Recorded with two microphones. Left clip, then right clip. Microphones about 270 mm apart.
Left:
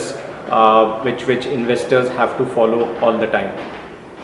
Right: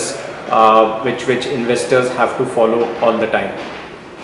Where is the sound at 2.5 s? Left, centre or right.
Left.